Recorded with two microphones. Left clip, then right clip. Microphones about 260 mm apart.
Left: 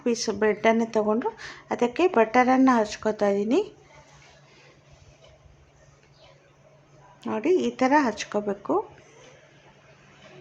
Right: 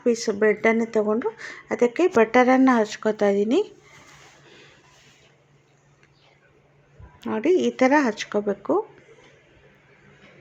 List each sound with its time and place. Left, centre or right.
0.0 s speech: centre
7.2 s speech: centre